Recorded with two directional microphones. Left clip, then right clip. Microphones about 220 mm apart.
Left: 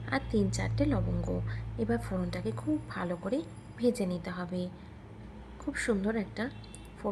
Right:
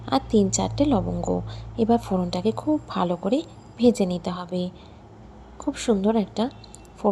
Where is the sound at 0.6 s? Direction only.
20° right (ahead or behind).